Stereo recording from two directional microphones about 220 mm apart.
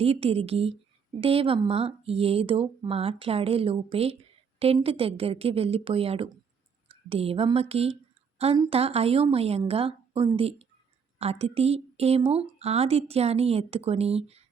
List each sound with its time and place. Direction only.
0.0 s a woman's voice: 25° right (ahead or behind)